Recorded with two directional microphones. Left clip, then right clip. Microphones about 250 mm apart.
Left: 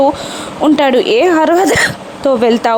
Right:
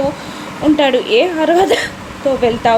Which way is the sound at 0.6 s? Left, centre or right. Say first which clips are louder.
Left 3 dB; left.